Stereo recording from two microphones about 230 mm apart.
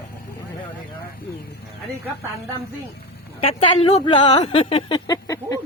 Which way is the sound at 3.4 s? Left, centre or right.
Left.